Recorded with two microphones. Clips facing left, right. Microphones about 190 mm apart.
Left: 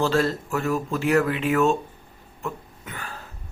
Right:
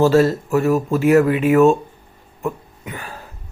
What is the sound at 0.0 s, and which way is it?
Speech, 15° right (ahead or behind).